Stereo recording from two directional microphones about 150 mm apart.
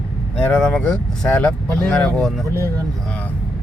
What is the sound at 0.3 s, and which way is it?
Speech, 5° left (ahead or behind).